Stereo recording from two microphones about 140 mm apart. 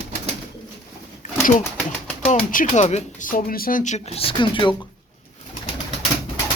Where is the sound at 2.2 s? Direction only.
45° left (ahead or behind).